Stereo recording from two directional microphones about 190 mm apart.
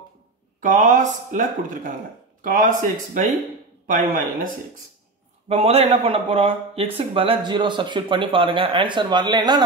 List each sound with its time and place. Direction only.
0.6 s speech: 40° right (ahead or behind)
3.8 s speech: 45° right (ahead or behind)
5.5 s speech: 35° right (ahead or behind)